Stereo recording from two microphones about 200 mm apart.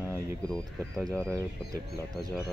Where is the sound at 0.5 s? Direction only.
5° left (ahead or behind).